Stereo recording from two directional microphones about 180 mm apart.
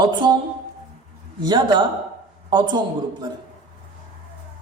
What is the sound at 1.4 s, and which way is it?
Speech, 25° right (ahead or behind).